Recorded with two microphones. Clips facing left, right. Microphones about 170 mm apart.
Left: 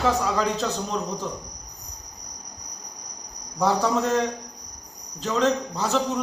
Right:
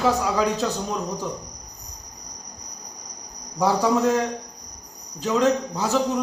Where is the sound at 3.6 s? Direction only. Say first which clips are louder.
Right 2 dB; 5° right (ahead or behind).